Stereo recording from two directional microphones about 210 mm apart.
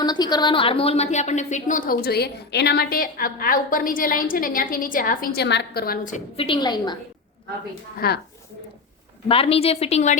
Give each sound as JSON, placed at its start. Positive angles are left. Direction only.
{"t": 0.0, "sound": "a woman's voice", "side_deg": 20}
{"t": 7.9, "sound": "a woman's voice", "side_deg": 50}
{"t": 9.3, "sound": "a woman's voice", "side_deg": 25}